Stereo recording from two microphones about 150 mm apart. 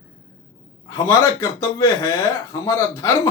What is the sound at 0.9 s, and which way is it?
Speech, 20° left (ahead or behind).